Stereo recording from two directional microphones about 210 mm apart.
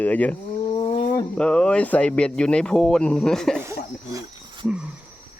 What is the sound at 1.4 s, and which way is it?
Speech, 5° left (ahead or behind).